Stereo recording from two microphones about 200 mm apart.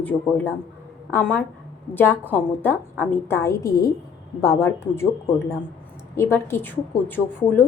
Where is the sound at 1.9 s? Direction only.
10° left (ahead or behind).